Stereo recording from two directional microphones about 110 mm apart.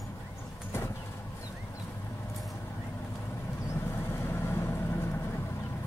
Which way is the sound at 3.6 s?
20° left (ahead or behind).